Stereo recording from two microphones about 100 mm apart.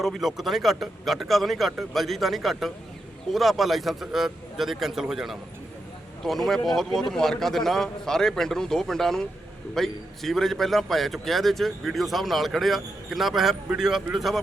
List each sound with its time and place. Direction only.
0.0 s a man's voice: centre (ahead or behind)